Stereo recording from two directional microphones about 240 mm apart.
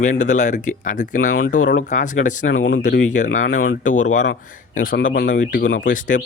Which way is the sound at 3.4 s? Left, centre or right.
Left.